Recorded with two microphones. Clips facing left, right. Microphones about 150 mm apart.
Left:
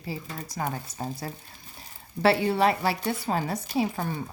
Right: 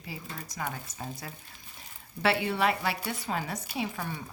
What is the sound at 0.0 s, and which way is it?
A woman's voice, 35° left (ahead or behind).